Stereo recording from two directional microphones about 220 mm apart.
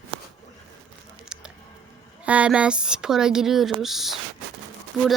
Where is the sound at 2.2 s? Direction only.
5° right (ahead or behind).